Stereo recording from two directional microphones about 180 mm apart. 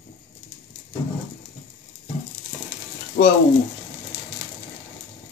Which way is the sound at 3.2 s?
80° left.